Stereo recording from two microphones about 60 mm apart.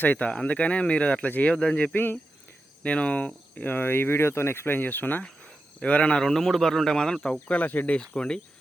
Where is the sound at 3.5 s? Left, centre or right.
Left.